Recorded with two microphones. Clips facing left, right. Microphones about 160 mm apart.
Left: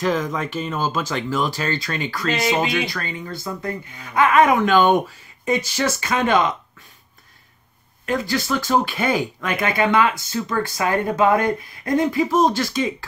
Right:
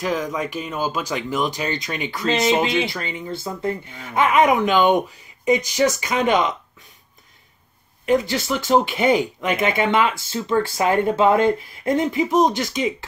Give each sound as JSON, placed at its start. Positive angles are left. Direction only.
{"t": 0.0, "sound": "speech", "side_deg": -10}
{"t": 8.0, "sound": "speech", "side_deg": -20}